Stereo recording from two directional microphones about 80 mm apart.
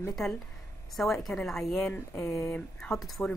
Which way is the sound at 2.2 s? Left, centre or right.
Left.